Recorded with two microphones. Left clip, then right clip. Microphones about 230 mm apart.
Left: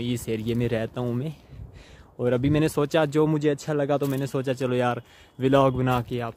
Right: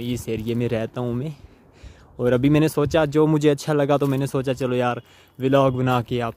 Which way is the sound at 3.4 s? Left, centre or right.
Right.